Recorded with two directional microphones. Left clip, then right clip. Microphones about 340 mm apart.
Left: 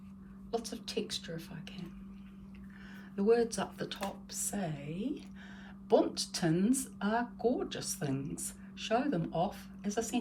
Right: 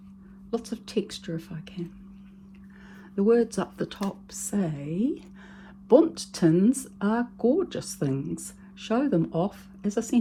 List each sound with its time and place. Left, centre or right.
0.5 s speech: centre
3.2 s speech: centre